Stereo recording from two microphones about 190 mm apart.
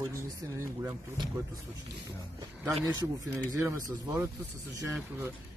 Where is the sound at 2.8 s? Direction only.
20° right (ahead or behind).